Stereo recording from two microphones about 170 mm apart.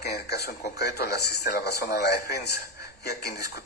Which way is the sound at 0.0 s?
75° left (ahead or behind).